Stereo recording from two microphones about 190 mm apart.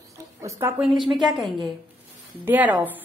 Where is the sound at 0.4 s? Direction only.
15° right (ahead or behind).